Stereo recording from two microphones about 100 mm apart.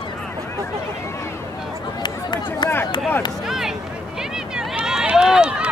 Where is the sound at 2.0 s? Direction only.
45° left (ahead or behind).